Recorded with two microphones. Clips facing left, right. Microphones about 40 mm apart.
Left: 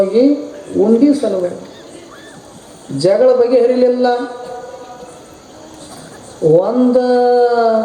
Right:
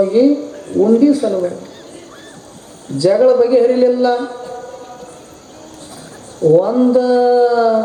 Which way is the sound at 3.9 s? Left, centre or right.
Left.